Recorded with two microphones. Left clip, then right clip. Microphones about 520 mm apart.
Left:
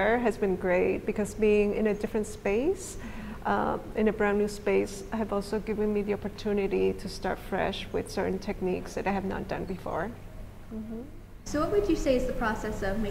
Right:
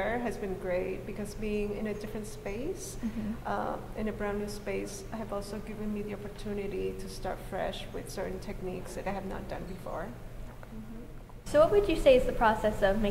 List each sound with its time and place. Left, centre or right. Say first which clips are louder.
0.0 s a woman's voice: left 7 dB; left
11.5 s a woman's voice: right 3 dB; right